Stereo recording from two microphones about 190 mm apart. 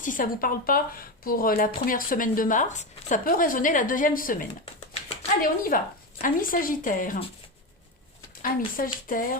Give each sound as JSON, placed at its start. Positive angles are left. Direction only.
{"t": 0.0, "sound": "speech", "side_deg": 45}
{"t": 8.4, "sound": "speech", "side_deg": 45}